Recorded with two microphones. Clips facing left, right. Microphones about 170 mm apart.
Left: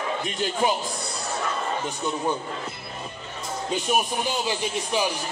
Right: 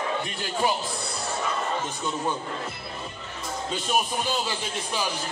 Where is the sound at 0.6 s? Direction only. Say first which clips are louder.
Left 2 dB; 20° left (ahead or behind).